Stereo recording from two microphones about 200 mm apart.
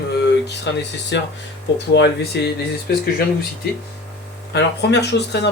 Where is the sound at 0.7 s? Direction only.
65° left (ahead or behind).